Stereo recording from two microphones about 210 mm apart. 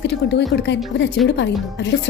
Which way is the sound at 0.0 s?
55° left (ahead or behind).